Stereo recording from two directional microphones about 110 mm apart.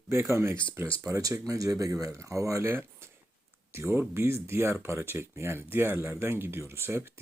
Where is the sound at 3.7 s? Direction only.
20° right (ahead or behind).